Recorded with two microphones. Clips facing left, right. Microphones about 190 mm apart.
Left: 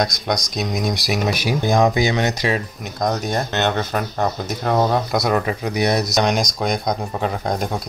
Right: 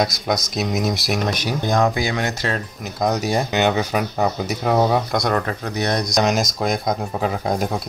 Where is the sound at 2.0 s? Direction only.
20° left (ahead or behind).